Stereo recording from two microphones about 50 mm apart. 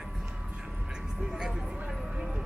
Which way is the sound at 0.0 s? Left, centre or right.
Centre.